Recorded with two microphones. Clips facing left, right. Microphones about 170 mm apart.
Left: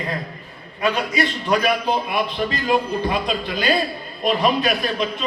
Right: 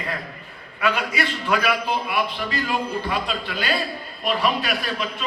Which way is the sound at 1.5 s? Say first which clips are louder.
Left 2 dB; 40° left (ahead or behind).